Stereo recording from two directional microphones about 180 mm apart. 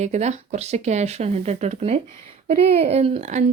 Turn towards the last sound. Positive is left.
turn(degrees=-35)  # may be behind; listen again after turning